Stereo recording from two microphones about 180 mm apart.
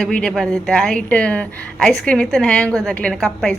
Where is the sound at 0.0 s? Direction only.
5° left (ahead or behind).